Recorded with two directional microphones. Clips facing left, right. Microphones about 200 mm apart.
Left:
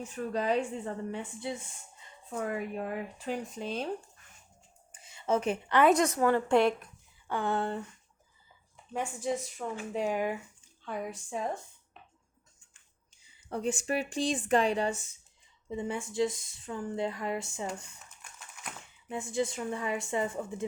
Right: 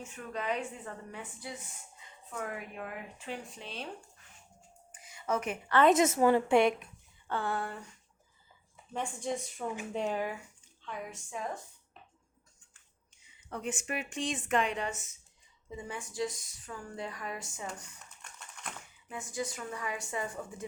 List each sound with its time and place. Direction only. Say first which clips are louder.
0.0 s speech: left 6 dB; 35° left (ahead or behind)
4.9 s a sound: left 4 dB; 25° left (ahead or behind)
6.0 s speech: right 1 dB; 20° right (ahead or behind)
6.5 s speech: even; centre (ahead or behind)
7.3 s speech: left 4 dB; 20° left (ahead or behind)
8.9 s speech: left 3 dB; 5° left (ahead or behind)
10.8 s speech: left 5 dB; 35° left (ahead or behind)
13.2 s speech: left 5 dB; 30° left (ahead or behind)
18.2 s typing: right 1 dB; 5° left (ahead or behind)
18.8 s speech: left 11 dB; 25° left (ahead or behind)